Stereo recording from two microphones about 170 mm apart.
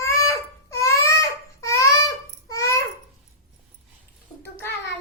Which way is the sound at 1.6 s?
20° left (ahead or behind).